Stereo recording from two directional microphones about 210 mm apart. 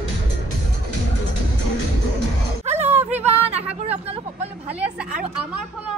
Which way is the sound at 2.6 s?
30° right (ahead or behind).